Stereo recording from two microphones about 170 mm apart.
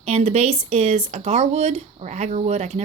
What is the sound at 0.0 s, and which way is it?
Speech, 40° right (ahead or behind).